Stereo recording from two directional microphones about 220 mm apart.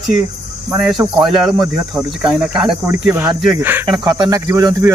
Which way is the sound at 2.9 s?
10° right (ahead or behind).